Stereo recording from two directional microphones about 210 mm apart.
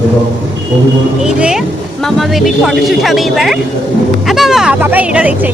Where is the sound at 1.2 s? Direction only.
5° right (ahead or behind).